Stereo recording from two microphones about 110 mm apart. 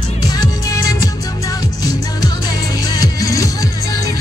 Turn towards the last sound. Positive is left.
turn(degrees=30)  # may be behind; listen again after turning